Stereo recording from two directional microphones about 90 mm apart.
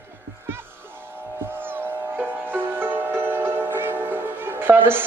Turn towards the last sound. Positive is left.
turn(degrees=-25)  # may be behind; listen again after turning